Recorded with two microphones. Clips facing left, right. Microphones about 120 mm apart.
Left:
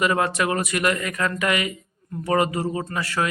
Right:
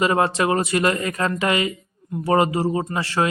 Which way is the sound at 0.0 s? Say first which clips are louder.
Right 3 dB; 30° right (ahead or behind).